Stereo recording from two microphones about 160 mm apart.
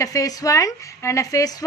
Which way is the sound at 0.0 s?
20° left (ahead or behind).